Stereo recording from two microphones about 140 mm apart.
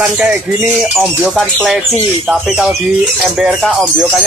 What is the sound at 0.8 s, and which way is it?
Speech, 5° right (ahead or behind).